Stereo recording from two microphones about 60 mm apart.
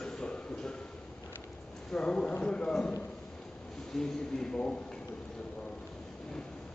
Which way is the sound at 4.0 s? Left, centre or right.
Centre.